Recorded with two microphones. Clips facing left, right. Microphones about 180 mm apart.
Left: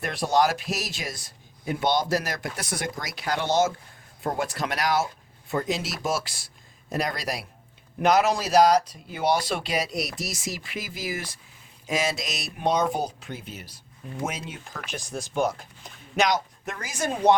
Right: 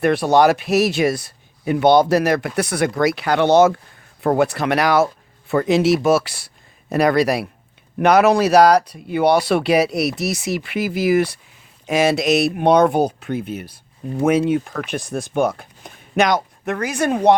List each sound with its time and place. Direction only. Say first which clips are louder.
0.0 s speech: right 9 dB; 65° right (ahead or behind)